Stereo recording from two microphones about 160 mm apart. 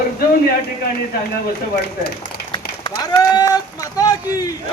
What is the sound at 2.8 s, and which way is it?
Speech, 25° left (ahead or behind).